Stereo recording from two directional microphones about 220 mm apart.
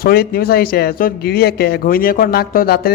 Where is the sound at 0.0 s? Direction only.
45° left (ahead or behind).